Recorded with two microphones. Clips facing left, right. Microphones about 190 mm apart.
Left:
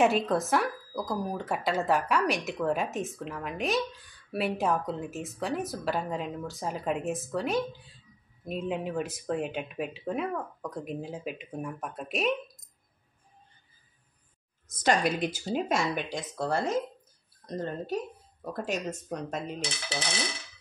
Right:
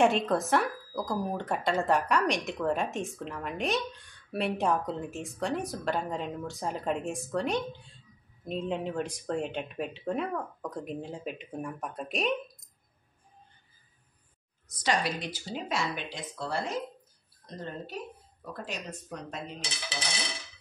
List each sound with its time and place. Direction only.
0.0 s a woman's voice: centre (ahead or behind)
14.7 s speech: 50° left (ahead or behind)